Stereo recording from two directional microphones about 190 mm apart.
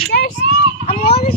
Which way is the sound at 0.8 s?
35° left (ahead or behind).